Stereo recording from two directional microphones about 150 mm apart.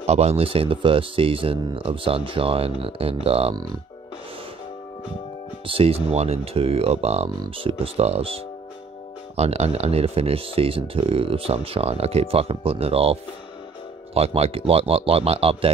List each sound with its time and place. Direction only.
0.0 s speech: 45° right (ahead or behind)
5.7 s speech: 40° right (ahead or behind)
9.4 s speech: 45° right (ahead or behind)